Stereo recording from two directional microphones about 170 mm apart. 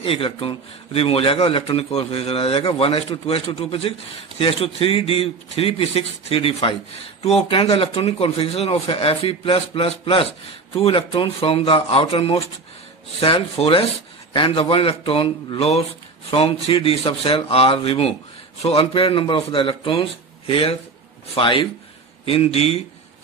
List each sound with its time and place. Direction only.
0.0 s a man's voice: 35° left (ahead or behind)